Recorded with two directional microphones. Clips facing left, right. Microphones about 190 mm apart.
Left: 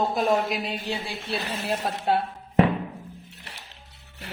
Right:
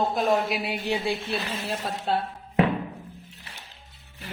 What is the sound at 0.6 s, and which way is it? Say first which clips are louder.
Speech: right 4 dB; 15° right (ahead or behind).